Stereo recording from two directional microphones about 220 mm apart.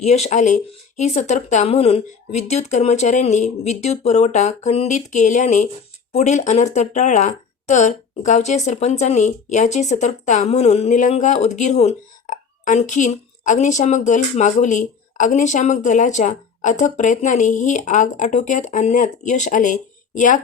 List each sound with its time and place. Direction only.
0.0 s speech: 30° left (ahead or behind)